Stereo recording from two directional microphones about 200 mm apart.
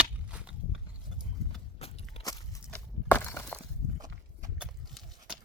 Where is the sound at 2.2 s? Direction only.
15° left (ahead or behind).